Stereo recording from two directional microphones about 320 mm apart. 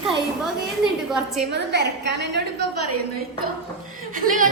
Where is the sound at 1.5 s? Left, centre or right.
Right.